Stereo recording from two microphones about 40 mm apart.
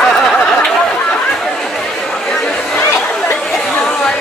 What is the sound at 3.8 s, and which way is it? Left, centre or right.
Chatter, centre.